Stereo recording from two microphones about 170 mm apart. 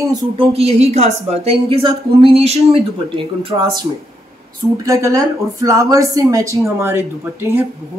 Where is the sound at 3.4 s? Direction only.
25° right (ahead or behind).